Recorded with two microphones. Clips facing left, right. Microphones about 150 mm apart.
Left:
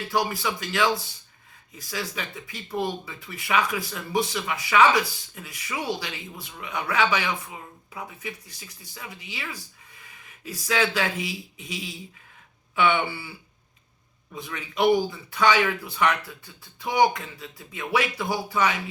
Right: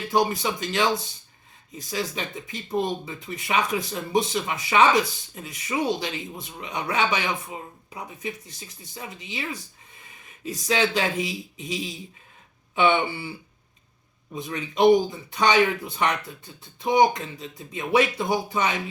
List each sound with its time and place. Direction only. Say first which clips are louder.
0.1 s speech: right 4 dB; 20° right (ahead or behind)
14.3 s speech: right 3 dB; 20° right (ahead or behind)